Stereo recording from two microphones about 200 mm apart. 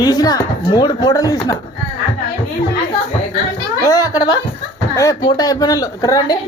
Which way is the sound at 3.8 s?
20° left (ahead or behind).